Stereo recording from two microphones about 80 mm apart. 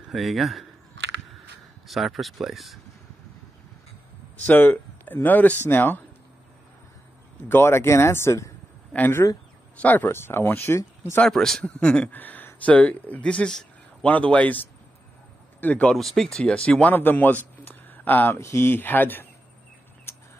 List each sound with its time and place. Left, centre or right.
0.1 s speech: centre
1.9 s speech: centre
4.5 s speech: left
7.4 s speech: left
9.8 s speech: centre
10.0 s speech: left
11.2 s speech: centre
16.0 s speech: centre; by 18.4 s left
18.4 s speech: left